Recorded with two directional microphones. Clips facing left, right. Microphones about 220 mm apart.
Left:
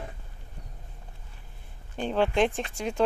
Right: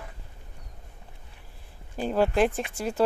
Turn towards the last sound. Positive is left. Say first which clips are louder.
# right 1 dB
turn(degrees=-5)  # may be behind; listen again after turning